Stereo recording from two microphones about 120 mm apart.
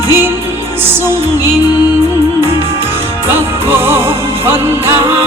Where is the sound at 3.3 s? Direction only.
20° right (ahead or behind).